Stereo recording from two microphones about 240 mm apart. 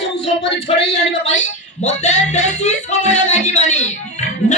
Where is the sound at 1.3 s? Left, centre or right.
Left.